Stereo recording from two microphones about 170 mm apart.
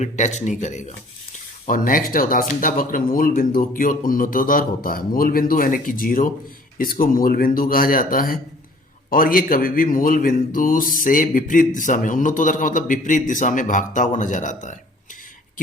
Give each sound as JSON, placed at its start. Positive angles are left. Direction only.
{"t": 0.0, "sound": "speech", "side_deg": 45}